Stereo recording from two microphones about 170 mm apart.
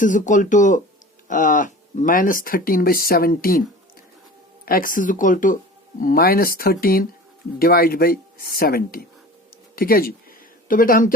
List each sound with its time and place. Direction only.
0.0 s speech: 50° left (ahead or behind)
4.6 s speech: 55° left (ahead or behind)
9.7 s a sound: 60° left (ahead or behind)